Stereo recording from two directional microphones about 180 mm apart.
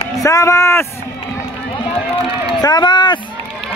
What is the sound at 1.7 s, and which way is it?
Speech, 30° left (ahead or behind).